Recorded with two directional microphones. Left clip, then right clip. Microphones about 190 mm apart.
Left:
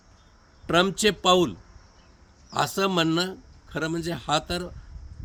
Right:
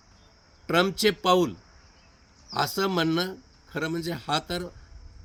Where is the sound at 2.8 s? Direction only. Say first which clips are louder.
Left 3 dB; 5° left (ahead or behind).